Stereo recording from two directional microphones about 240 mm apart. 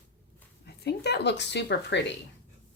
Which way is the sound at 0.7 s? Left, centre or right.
Left.